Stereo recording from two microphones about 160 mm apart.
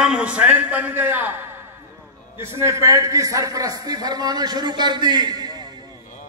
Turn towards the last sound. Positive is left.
turn(degrees=-25)  # may be behind; listen again after turning